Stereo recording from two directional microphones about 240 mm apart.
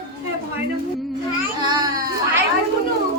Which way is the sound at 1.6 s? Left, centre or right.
Centre.